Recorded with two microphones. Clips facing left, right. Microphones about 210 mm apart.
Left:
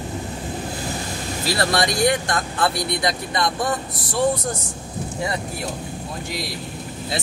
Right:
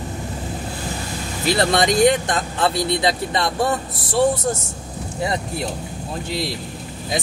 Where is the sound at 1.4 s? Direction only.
20° right (ahead or behind).